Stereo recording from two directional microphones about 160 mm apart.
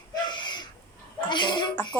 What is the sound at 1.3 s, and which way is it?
Speech, 30° left (ahead or behind).